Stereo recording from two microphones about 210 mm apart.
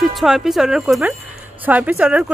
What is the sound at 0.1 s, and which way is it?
Speech, centre (ahead or behind).